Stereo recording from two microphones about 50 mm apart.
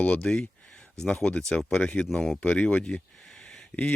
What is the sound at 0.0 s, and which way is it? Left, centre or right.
Speech, left.